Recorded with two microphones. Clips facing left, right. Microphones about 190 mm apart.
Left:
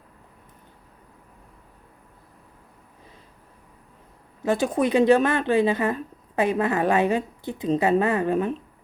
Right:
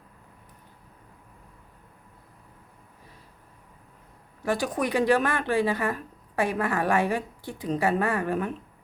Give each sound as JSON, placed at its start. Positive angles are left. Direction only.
{"t": 4.4, "sound": "a woman's voice", "side_deg": 25}